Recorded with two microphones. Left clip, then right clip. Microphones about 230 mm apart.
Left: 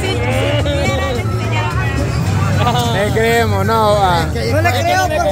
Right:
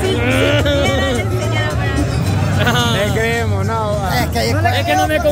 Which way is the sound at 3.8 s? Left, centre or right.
Left.